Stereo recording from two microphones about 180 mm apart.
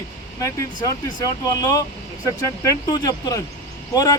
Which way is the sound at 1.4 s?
20° left (ahead or behind).